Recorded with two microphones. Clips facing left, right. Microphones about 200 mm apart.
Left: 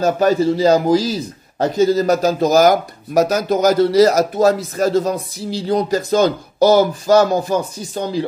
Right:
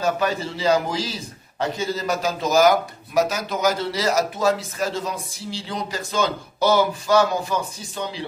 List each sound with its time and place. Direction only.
0.0 s a man's voice: 40° left (ahead or behind)